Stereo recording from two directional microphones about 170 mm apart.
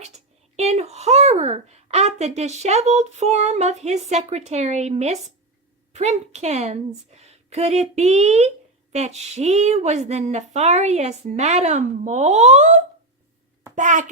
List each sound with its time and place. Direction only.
0.5 s a woman's voice: 40° right (ahead or behind)